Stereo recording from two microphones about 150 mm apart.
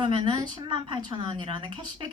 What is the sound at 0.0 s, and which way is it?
Speech, 35° right (ahead or behind).